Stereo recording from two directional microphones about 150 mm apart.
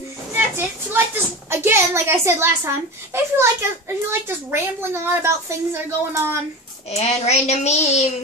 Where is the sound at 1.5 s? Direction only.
15° right (ahead or behind).